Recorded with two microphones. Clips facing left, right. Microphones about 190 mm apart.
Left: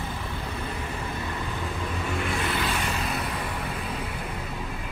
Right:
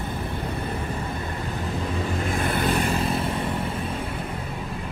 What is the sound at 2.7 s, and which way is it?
Vehicle, 35° right (ahead or behind).